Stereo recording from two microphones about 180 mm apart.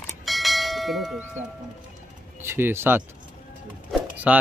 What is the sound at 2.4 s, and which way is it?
Speech, 15° right (ahead or behind).